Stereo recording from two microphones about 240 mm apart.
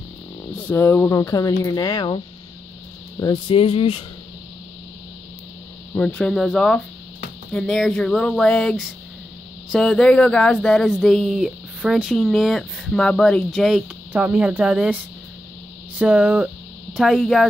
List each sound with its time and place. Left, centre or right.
0.6 s speech: centre
5.9 s speech: centre